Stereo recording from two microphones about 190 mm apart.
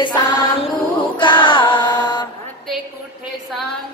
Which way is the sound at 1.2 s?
25° left (ahead or behind).